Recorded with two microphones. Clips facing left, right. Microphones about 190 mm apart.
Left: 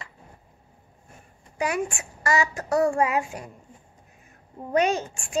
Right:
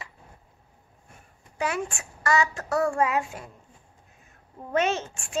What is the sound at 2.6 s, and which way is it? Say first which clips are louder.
Child singing: left 6 dB; 20° left (ahead or behind).